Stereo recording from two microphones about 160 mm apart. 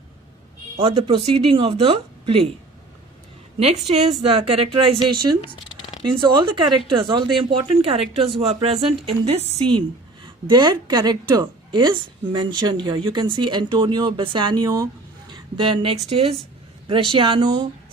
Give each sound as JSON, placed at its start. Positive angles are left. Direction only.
{"t": 0.8, "sound": "speech", "side_deg": -40}
{"t": 3.9, "sound": "a woman's voice", "side_deg": -40}